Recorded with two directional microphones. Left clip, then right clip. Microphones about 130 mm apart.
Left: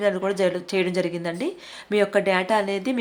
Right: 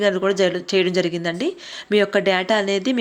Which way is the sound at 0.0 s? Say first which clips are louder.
Right 4 dB; 20° right (ahead or behind).